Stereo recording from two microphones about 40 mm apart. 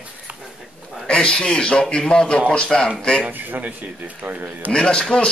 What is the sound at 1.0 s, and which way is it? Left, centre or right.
A man's voice, left.